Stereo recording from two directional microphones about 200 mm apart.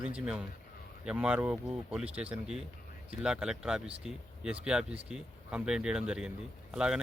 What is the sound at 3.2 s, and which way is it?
Speech, 5° right (ahead or behind).